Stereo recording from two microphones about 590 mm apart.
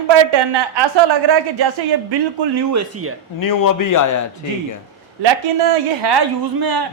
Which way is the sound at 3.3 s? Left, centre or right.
Left.